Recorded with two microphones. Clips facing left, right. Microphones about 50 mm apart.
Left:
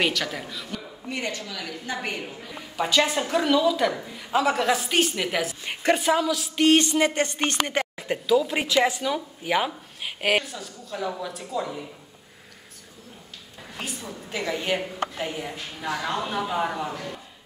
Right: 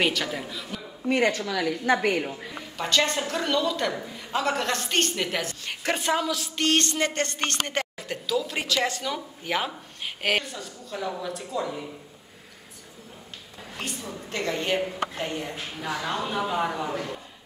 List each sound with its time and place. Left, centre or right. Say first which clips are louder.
0.0 s speech: even; centre
1.1 s a woman's voice: right 8 dB; right
2.0 s a woman's voice: right 7 dB; right
2.8 s a woman's voice: left 2 dB; centre
8.0 s speech: left 10 dB; centre
13.7 s speech: even; centre